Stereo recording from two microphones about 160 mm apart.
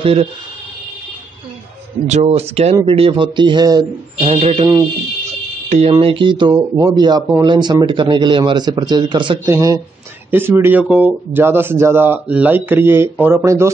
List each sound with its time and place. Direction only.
0.0 s speech: 35° right (ahead or behind)
2.0 s speech: 40° right (ahead or behind); by 4.3 s 25° right (ahead or behind)
4.3 s speech: 35° right (ahead or behind)
5.7 s speech: 40° right (ahead or behind); by 13.7 s 15° right (ahead or behind)